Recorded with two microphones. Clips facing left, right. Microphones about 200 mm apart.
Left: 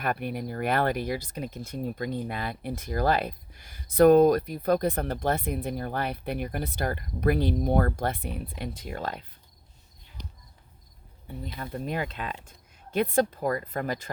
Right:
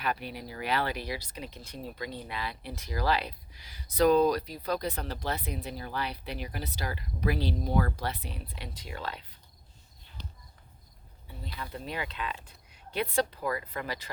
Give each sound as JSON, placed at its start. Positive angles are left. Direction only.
{"t": 0.0, "sound": "speech", "side_deg": 55}
{"t": 10.2, "sound": "a sound", "side_deg": 15}
{"t": 11.5, "sound": "speech", "side_deg": 50}